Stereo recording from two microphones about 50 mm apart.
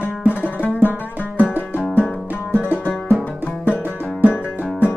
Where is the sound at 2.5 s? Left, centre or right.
Right.